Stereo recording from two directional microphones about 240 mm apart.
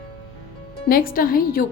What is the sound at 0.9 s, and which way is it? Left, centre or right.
Speech, left.